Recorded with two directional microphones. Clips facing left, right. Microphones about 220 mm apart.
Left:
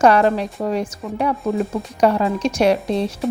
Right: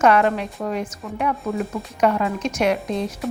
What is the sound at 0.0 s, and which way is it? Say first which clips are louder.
Speech: left 3 dB; 35° left (ahead or behind).